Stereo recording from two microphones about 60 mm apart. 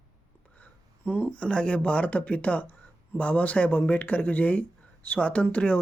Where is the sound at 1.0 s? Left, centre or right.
Left.